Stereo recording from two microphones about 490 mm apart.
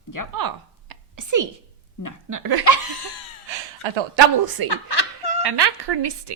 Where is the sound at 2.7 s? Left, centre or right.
Left.